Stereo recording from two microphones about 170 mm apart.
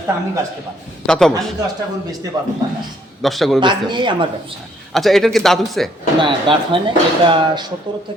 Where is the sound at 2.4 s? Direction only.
25° right (ahead or behind).